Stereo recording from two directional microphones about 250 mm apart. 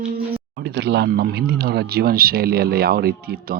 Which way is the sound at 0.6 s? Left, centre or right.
Right.